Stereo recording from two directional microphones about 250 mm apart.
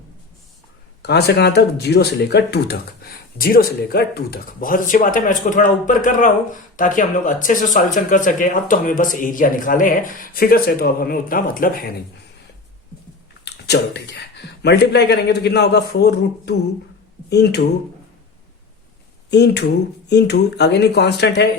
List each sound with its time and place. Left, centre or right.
1.0 s speech: left
13.4 s speech: left
19.3 s speech: left